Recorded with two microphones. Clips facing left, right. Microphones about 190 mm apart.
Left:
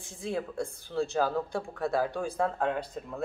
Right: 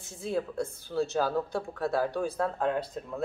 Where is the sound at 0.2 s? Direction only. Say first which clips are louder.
Right 2 dB; centre (ahead or behind).